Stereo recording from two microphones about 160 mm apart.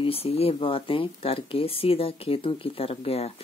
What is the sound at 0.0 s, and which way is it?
Speech, 35° left (ahead or behind).